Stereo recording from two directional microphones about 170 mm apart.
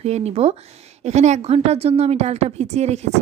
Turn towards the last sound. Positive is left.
turn(degrees=-40)  # may be behind; listen again after turning